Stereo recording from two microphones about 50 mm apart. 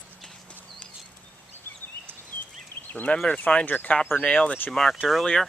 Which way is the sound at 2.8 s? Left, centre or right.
Left.